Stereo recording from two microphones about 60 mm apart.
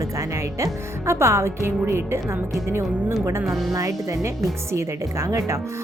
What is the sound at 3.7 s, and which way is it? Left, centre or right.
A woman's voice, right.